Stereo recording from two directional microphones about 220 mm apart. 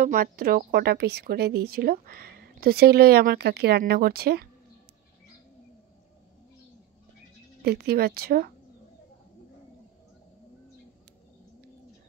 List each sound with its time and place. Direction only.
0.0 s speech: 40° right (ahead or behind)
7.6 s speech: 45° right (ahead or behind)